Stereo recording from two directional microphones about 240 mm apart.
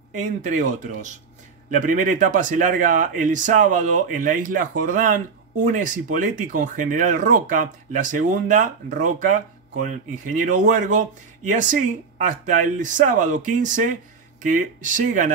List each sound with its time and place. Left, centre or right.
0.2 s speech: right